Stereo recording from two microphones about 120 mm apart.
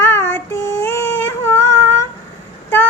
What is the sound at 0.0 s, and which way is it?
Child singing, 20° left (ahead or behind).